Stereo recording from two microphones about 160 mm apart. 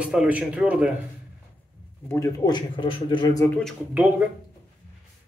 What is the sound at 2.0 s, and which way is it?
Speech, 20° left (ahead or behind).